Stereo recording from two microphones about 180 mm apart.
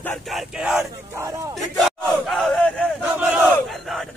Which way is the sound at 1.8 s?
Centre (ahead or behind).